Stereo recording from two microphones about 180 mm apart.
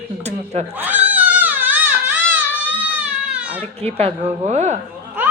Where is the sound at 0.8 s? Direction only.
10° right (ahead or behind).